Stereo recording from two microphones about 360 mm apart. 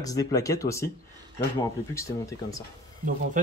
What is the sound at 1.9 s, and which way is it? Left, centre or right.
Speech, centre.